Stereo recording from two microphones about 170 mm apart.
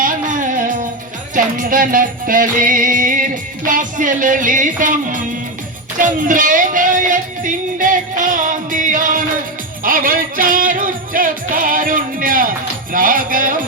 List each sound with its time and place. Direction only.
0.0 s music: 50° right (ahead or behind)